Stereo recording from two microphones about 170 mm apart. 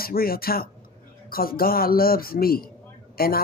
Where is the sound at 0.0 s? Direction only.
60° left (ahead or behind).